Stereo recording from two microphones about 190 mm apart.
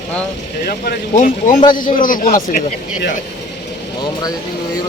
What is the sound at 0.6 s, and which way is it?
Speech, 55° left (ahead or behind).